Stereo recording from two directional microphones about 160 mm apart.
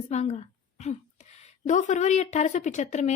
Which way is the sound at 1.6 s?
50° left (ahead or behind).